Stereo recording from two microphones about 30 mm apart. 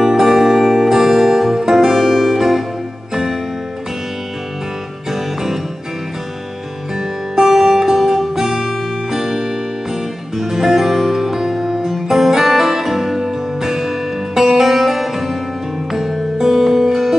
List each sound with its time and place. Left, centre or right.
0.0 s music: centre
2.0 s music: centre
2.3 s music: centre
5.1 s music: centre
7.3 s music: centre